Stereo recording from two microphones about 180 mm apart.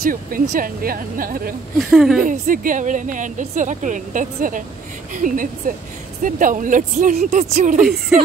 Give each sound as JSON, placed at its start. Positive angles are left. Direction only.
{"t": 0.0, "sound": "a woman's voice", "side_deg": -50}
{"t": 1.8, "sound": "speech", "side_deg": 0}
{"t": 2.2, "sound": "a woman's voice", "side_deg": -50}